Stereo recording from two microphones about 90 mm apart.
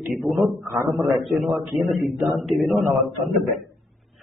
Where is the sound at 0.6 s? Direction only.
30° right (ahead or behind).